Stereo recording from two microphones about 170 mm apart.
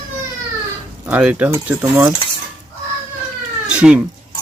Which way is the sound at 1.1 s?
10° right (ahead or behind).